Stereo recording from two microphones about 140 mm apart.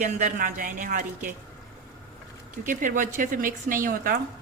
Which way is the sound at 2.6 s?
70° right (ahead or behind).